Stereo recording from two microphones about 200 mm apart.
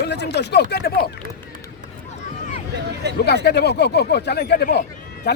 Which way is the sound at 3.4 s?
55° left (ahead or behind).